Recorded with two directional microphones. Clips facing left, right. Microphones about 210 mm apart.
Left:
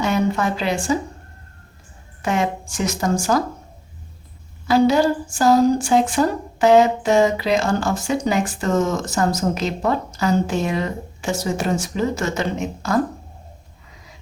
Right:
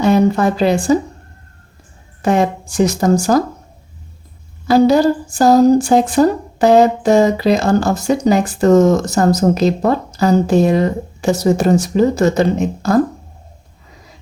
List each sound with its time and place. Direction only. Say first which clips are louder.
0.0 s speech: right 7 dB; 35° right (ahead or behind)
2.2 s a woman's voice: right 7 dB; 35° right (ahead or behind)
4.7 s a woman's voice: right 5 dB; 40° right (ahead or behind)